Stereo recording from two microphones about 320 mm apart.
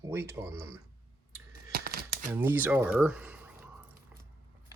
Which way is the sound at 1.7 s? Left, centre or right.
Right.